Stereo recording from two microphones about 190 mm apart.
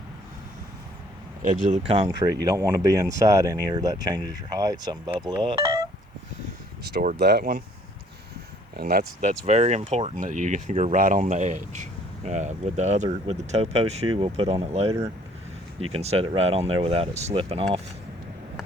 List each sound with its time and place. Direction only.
1.4 s speech: 45° right (ahead or behind)
2.0 s speech: 20° right (ahead or behind)
6.9 s speech: 50° right (ahead or behind)
8.7 s speech: 55° right (ahead or behind)
9.5 s speech: 35° right (ahead or behind)